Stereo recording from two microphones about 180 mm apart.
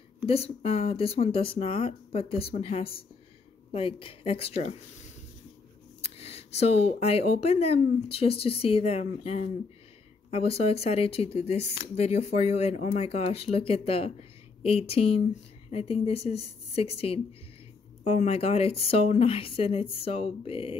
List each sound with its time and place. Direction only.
0.3 s speech: 35° left (ahead or behind)
6.0 s speech: 35° left (ahead or behind)